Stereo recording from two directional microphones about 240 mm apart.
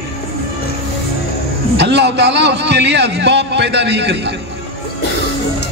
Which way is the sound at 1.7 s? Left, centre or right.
Right.